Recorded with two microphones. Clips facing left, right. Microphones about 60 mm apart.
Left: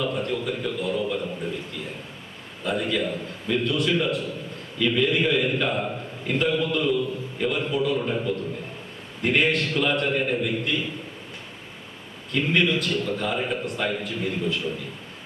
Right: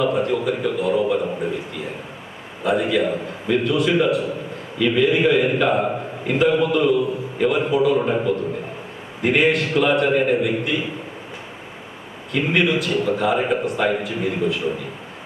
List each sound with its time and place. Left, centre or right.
0.0 s a man's voice: centre
3.7 s a man's voice: centre
7.9 s a man's voice: right
9.2 s a man's voice: centre
10.4 s a man's voice: centre
12.3 s a man's voice: centre
13.3 s a man's voice: right